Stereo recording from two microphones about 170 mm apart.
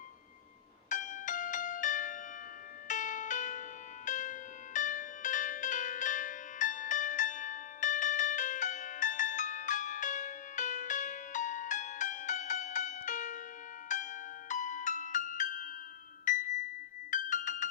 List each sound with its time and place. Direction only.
0.9 s music: 50° left (ahead or behind)